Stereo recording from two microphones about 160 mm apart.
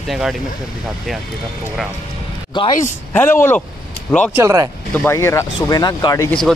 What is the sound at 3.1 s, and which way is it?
Speech, 15° left (ahead or behind).